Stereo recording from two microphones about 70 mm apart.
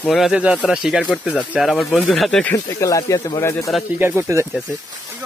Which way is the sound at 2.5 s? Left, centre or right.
Left.